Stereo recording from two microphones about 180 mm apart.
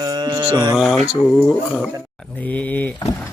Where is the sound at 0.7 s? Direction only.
Centre (ahead or behind).